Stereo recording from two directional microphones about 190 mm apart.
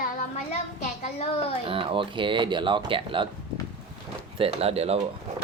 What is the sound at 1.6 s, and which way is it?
Speech, 30° right (ahead or behind).